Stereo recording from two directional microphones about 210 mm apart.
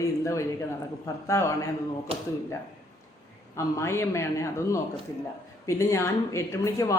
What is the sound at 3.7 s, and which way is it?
Speech, 15° left (ahead or behind).